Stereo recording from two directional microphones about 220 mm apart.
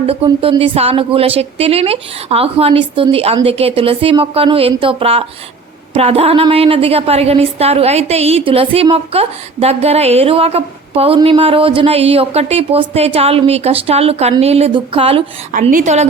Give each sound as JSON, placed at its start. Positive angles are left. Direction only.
{"t": 0.0, "sound": "a woman's voice", "side_deg": -25}